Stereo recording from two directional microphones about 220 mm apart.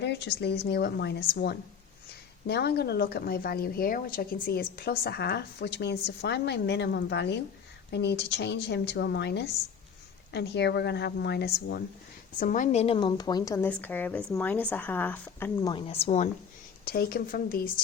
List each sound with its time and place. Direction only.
0.0 s a woman's voice: 50° left (ahead or behind)
12.4 s a woman's voice: 35° left (ahead or behind); by 15.7 s 10° left (ahead or behind)
15.7 s a woman's voice: 25° left (ahead or behind)
16.8 s a woman's voice: 45° left (ahead or behind)